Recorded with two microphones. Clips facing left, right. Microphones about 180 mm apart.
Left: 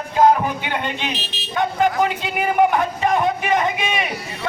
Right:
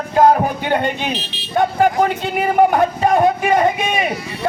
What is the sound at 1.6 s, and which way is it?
Vehicle, 45° right (ahead or behind).